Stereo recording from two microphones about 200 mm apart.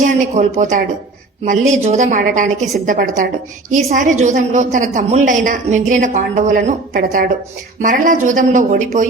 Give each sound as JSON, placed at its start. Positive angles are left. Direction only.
{"t": 0.0, "sound": "a woman's voice", "side_deg": -40}